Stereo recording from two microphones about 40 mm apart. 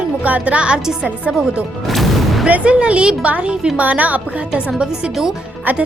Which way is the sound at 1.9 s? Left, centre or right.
Centre.